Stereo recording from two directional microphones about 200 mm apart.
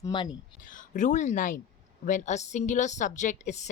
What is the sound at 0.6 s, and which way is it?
A woman's voice, 40° left (ahead or behind).